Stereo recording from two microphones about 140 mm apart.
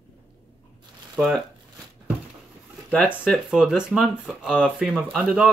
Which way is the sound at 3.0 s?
5° right (ahead or behind).